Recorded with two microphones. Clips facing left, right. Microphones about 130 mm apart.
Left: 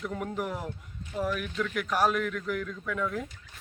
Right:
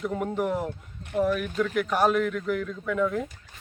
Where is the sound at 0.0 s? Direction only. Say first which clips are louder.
Right 5 dB; 5° right (ahead or behind).